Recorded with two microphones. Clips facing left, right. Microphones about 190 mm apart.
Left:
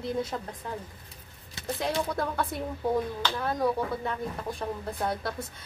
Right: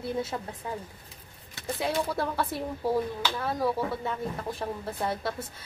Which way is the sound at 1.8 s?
5° right (ahead or behind).